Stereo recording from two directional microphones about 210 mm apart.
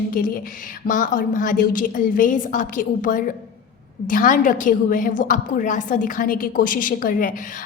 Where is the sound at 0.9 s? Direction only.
40° left (ahead or behind).